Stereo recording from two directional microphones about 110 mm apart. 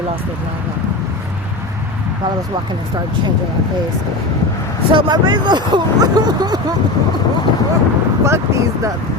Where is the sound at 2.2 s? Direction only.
45° right (ahead or behind).